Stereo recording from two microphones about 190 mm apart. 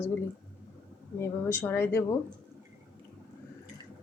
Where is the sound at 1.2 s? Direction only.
10° left (ahead or behind).